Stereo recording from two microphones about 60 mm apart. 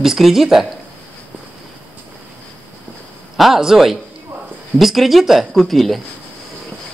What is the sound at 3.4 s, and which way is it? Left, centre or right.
Speech, centre.